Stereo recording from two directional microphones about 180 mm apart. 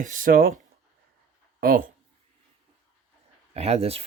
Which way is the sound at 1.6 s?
55° right (ahead or behind).